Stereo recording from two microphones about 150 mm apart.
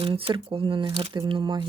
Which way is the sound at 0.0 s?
35° right (ahead or behind).